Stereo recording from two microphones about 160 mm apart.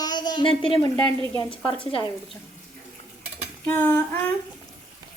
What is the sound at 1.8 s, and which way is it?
Speech, 35° left (ahead or behind).